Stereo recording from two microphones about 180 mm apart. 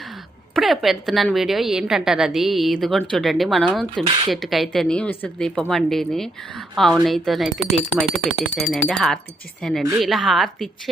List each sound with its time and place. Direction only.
0.5 s a woman's voice: centre (ahead or behind)
4.0 s speech: 30° right (ahead or behind)
4.3 s a woman's voice: centre (ahead or behind)